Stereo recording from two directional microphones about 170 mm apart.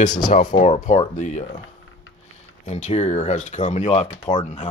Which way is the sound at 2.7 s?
40° left (ahead or behind).